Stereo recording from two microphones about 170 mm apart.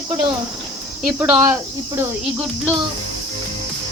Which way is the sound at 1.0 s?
10° right (ahead or behind).